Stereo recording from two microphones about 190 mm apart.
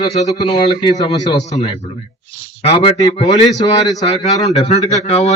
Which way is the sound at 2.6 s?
30° left (ahead or behind).